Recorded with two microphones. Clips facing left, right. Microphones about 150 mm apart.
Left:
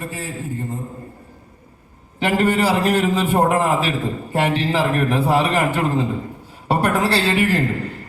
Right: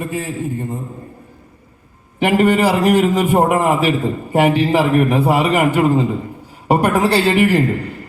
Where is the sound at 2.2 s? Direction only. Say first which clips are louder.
Right 4 dB; 15° right (ahead or behind).